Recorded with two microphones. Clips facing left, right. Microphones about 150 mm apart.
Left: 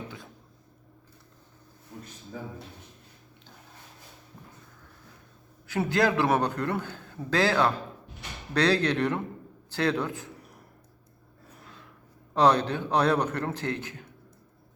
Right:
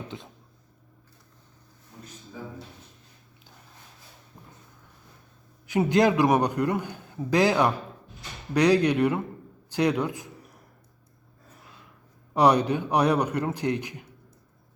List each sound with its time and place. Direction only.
5.6 s a man's voice: 15° right (ahead or behind)
12.3 s a man's voice: 15° right (ahead or behind)